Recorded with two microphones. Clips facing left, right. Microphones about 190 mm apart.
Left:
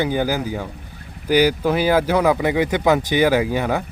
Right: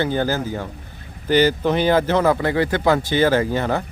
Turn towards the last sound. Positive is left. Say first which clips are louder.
# even
turn(degrees=10)  # may be behind; listen again after turning